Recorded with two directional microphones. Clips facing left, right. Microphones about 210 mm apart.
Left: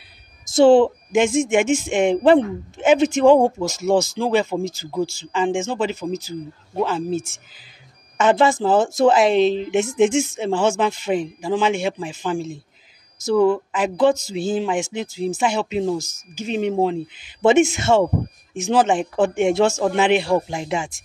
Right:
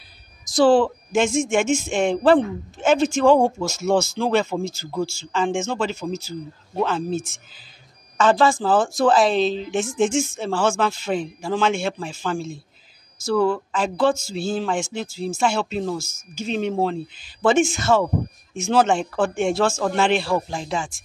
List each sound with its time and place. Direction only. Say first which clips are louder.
0.5 s speech: left 4 dB; 25° left (ahead or behind)
8.2 s speech: left 1 dB; 20° left (ahead or behind)